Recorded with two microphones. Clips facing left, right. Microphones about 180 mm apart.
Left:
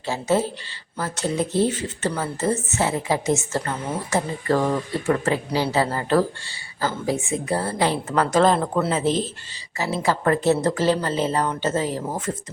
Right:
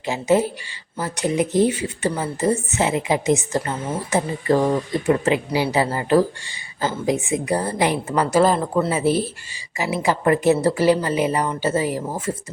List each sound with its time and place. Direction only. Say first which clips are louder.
0.0 s speech: right 3 dB; 15° right (ahead or behind)